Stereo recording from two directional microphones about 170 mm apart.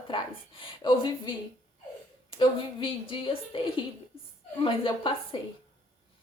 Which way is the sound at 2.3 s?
30° left (ahead or behind).